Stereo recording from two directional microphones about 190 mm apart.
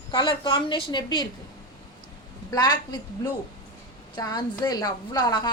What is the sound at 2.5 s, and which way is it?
Speech, 20° left (ahead or behind).